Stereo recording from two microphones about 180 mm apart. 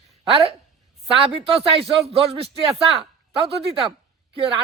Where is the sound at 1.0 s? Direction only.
30° right (ahead or behind).